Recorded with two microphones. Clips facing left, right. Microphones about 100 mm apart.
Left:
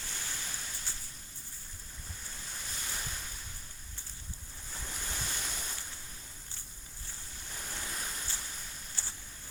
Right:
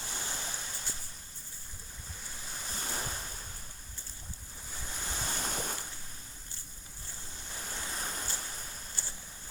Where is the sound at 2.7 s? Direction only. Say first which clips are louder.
Right 5 dB; 35° right (ahead or behind).